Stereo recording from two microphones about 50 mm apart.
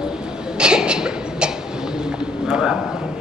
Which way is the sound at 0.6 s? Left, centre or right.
Centre.